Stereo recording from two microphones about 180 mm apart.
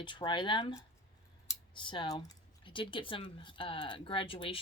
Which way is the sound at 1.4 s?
25° left (ahead or behind).